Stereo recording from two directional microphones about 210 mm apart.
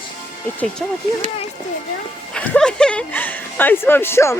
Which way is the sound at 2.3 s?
5° left (ahead or behind).